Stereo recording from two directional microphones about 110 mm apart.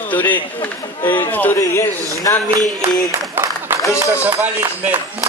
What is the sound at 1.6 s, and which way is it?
Speech, 30° left (ahead or behind).